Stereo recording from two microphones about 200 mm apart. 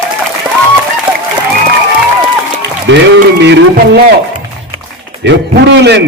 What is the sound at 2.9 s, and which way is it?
Speech, 65° right (ahead or behind).